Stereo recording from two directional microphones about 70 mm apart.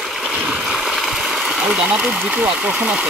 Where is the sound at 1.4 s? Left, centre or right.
Centre.